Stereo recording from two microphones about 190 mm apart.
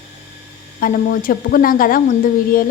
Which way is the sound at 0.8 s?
45° left (ahead or behind).